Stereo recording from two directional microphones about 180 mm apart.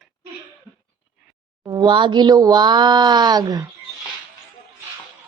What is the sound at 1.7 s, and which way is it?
Speech, 25° right (ahead or behind).